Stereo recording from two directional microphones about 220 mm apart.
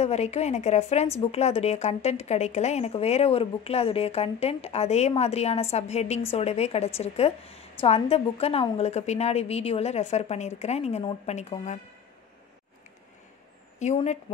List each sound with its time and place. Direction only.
0.0 s speech: 30° left (ahead or behind)
13.7 s speech: 30° left (ahead or behind)